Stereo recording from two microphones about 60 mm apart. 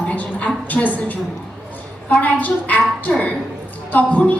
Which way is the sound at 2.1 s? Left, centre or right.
Left.